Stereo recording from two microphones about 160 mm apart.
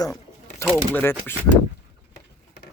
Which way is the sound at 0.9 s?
15° left (ahead or behind).